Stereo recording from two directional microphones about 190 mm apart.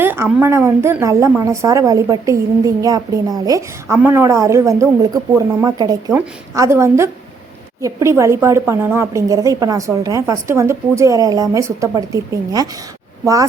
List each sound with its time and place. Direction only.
0.0 s a woman's voice: 10° right (ahead or behind)